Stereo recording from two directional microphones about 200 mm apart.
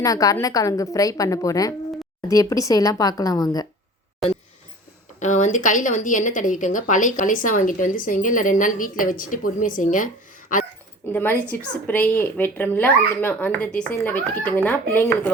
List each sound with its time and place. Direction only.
0.0 s speech: 15° left (ahead or behind)
5.2 s a woman's voice: 35° left (ahead or behind)
11.1 s speech: 10° left (ahead or behind)